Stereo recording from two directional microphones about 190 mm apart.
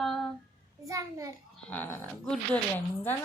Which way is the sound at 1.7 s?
10° left (ahead or behind).